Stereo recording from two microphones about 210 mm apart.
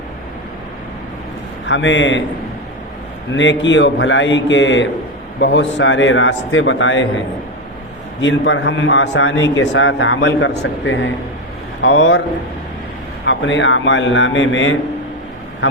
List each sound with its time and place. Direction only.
1.6 s speech: 60° left (ahead or behind)
3.3 s speech: 60° left (ahead or behind)
8.2 s speech: 65° left (ahead or behind)
13.2 s speech: 60° left (ahead or behind)